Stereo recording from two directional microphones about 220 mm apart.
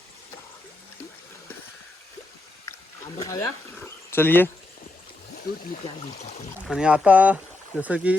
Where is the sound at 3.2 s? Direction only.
15° left (ahead or behind).